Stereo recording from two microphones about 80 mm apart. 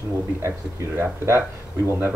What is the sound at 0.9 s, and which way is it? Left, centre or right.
Speech, right.